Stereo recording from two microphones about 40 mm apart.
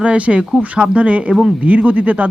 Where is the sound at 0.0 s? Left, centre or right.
Right.